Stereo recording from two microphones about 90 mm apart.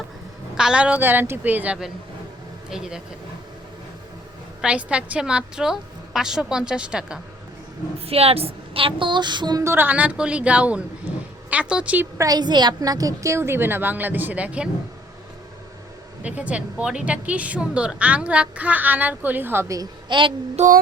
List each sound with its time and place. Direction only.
0.5 s a woman's voice: 10° right (ahead or behind)
2.6 s a woman's voice: 5° right (ahead or behind)
4.6 s a woman's voice: 10° right (ahead or behind)
7.9 s a woman's voice: 90° right; by 9.6 s 55° right (ahead or behind)
9.7 s a woman's voice: 20° right (ahead or behind)
12.1 s a woman's voice: 40° right (ahead or behind); by 14.7 s 15° right (ahead or behind)
16.2 s a woman's voice: 15° right (ahead or behind)
19.6 s a woman's voice: 40° right (ahead or behind)
20.1 s child singing: 65° right (ahead or behind)